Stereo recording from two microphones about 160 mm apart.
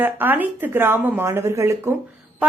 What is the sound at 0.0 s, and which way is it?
Speech, 10° right (ahead or behind).